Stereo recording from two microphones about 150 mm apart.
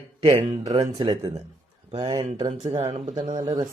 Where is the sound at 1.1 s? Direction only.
25° right (ahead or behind).